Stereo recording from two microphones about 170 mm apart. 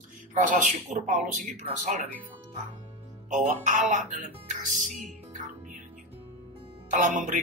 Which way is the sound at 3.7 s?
50° right (ahead or behind).